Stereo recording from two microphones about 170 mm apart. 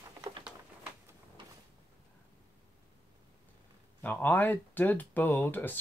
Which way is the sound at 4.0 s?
10° left (ahead or behind).